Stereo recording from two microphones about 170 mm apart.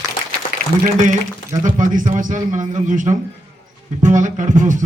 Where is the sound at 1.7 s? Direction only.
50° right (ahead or behind).